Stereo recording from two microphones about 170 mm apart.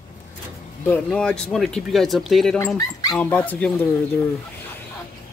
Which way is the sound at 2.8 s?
20° left (ahead or behind).